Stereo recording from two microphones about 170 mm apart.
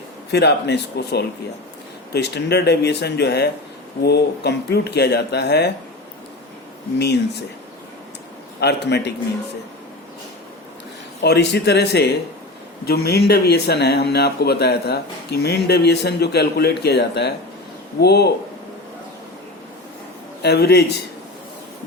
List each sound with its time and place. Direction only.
0.3 s speech: 80° left
7.0 s speech: 75° left (ahead or behind)
8.6 s a man's voice: 80° left
11.2 s a man's voice: 75° left (ahead or behind)
20.4 s speech: 75° left (ahead or behind)